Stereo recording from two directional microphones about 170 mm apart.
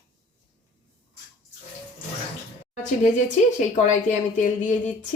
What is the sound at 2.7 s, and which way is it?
A woman's voice, 45° left (ahead or behind).